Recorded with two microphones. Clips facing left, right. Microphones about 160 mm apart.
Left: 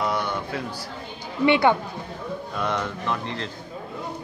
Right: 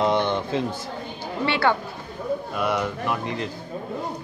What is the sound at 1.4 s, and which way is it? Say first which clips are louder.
Speech: left 4 dB; 15° left (ahead or behind).